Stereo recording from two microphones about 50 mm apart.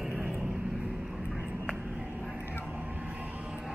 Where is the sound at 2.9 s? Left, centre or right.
Right.